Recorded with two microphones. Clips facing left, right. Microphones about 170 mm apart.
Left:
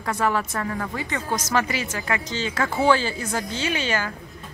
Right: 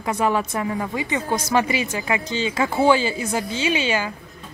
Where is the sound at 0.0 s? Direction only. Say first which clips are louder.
Right 2 dB; 15° right (ahead or behind).